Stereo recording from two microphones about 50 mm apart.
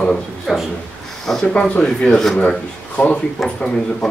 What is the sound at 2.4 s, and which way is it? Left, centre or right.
Speech, left.